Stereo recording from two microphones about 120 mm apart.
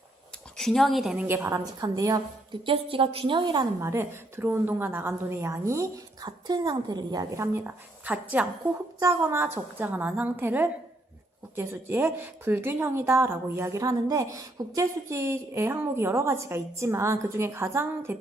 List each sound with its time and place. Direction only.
0.5 s speech: 5° left (ahead or behind)
1.1 s a woman's voice: 10° right (ahead or behind)
1.4 s a woman's voice: 25° right (ahead or behind)
2.6 s a woman's voice: 45° right (ahead or behind)
3.8 s a woman's voice: 20° right (ahead or behind)
9.0 s a woman's voice: 25° right (ahead or behind)